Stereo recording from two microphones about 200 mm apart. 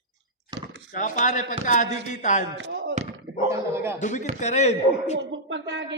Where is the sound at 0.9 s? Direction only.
40° left (ahead or behind).